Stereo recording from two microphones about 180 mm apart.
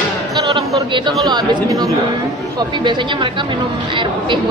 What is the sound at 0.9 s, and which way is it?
A woman's voice, 25° right (ahead or behind).